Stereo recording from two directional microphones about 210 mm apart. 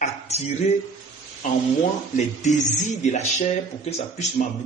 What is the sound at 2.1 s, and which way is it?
Speech, 35° left (ahead or behind).